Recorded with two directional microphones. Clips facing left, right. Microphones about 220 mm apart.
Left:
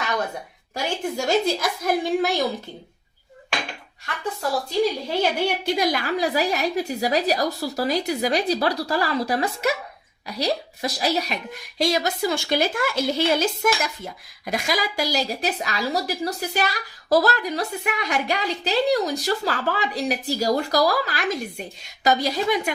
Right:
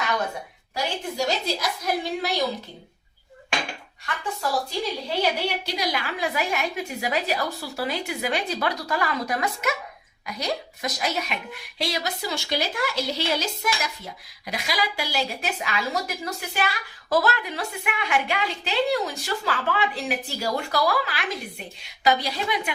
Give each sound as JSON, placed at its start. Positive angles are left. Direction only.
{"t": 0.7, "sound": "a woman's voice", "side_deg": 50}
{"t": 5.0, "sound": "a woman's voice", "side_deg": 50}